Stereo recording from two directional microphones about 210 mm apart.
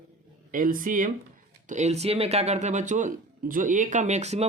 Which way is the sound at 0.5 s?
40° right (ahead or behind).